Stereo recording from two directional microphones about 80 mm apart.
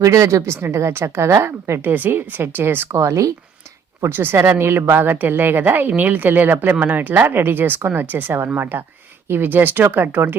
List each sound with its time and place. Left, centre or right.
0.0 s a woman's voice: right
2.9 s a woman's voice: right
4.0 s speech: right